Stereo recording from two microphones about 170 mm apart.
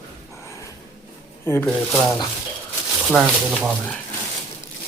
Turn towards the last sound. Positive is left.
turn(degrees=-5)  # may be behind; listen again after turning